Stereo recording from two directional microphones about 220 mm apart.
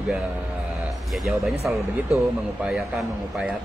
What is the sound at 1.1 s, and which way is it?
Speech, centre (ahead or behind).